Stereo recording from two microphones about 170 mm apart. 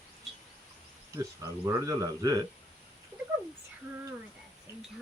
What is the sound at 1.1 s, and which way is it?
Speech, 20° right (ahead or behind).